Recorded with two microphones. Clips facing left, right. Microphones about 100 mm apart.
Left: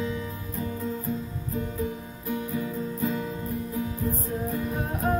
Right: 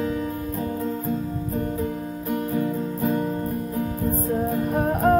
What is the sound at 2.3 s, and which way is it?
Music, 50° right (ahead or behind).